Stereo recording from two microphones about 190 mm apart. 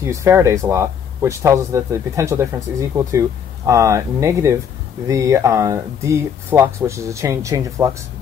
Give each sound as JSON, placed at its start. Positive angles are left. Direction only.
{"t": 0.0, "sound": "speech", "side_deg": -15}